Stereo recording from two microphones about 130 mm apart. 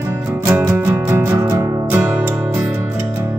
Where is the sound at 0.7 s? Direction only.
20° right (ahead or behind).